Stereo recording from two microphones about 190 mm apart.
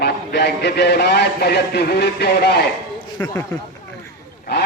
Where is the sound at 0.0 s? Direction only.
60° left (ahead or behind).